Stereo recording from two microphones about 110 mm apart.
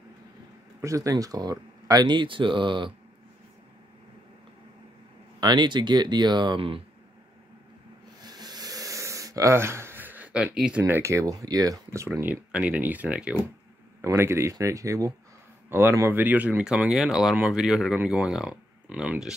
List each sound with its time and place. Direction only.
0.7 s speech: 30° right (ahead or behind); by 2.9 s 45° right (ahead or behind)
5.4 s speech: 45° right (ahead or behind)
8.2 s a sound: 40° right (ahead or behind); by 10.8 s 5° right (ahead or behind)
10.8 s speech: 25° right (ahead or behind)
12.2 s speech: 15° right (ahead or behind)
14.0 s speech: 25° right (ahead or behind); by 19.3 s 5° right (ahead or behind)